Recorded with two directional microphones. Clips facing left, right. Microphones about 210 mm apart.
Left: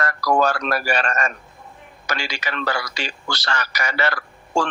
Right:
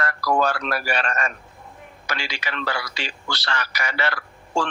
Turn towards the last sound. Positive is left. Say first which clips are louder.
# left 3 dB
turn(degrees=45)  # may be behind; listen again after turning